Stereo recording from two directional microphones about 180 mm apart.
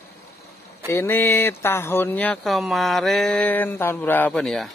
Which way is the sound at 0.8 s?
15° left (ahead or behind).